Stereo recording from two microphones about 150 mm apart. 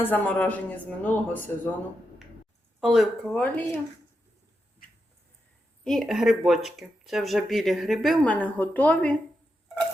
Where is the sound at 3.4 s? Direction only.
10° left (ahead or behind).